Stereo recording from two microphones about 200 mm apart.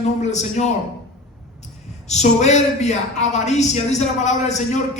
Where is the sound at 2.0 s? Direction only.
35° left (ahead or behind).